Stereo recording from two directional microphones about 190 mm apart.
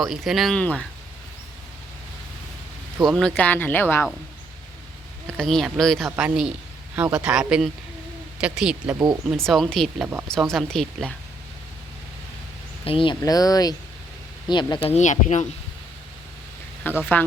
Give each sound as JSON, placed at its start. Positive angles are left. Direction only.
{"t": 0.0, "sound": "speech", "side_deg": 0}
{"t": 3.1, "sound": "speech", "side_deg": 5}
{"t": 5.4, "sound": "speech", "side_deg": 0}
{"t": 12.8, "sound": "speech", "side_deg": 30}
{"t": 14.9, "sound": "speech", "side_deg": 40}
{"t": 16.9, "sound": "speech", "side_deg": 10}